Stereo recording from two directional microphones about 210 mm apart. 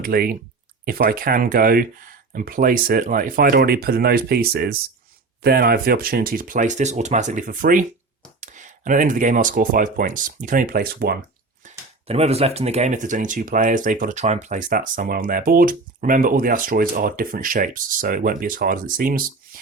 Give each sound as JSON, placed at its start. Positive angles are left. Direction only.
{"t": 0.0, "sound": "speech", "side_deg": -45}
{"t": 11.6, "sound": "speech", "side_deg": -30}